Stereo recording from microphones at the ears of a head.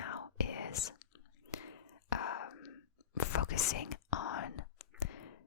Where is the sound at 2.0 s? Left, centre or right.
Left.